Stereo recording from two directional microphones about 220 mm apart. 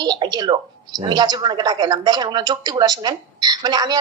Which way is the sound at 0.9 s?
20° right (ahead or behind).